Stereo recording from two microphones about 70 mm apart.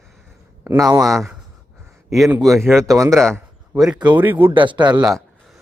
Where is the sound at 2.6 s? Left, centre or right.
Right.